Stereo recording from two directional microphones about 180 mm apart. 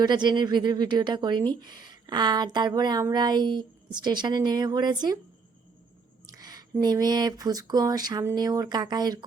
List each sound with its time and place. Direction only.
0.0 s speech: 25° right (ahead or behind)
6.3 s speech: 20° right (ahead or behind)